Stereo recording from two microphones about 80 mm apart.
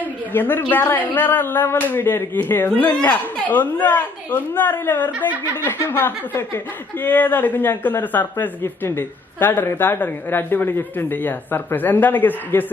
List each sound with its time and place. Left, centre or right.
0.3 s speech: left